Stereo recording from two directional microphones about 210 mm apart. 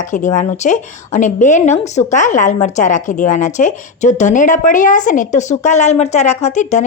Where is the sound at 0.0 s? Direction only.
35° left (ahead or behind).